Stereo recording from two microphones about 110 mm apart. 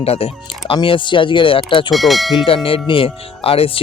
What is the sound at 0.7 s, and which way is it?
Speech, 50° left (ahead or behind).